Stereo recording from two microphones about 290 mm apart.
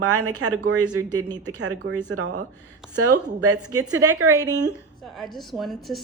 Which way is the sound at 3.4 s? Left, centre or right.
Right.